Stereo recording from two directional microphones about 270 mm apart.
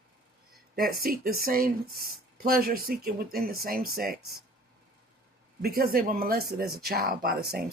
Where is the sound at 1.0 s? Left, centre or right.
Right.